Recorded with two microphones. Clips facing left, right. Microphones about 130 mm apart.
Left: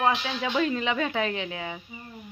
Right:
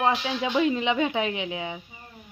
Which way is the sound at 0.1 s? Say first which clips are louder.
Right 2 dB; 15° right (ahead or behind).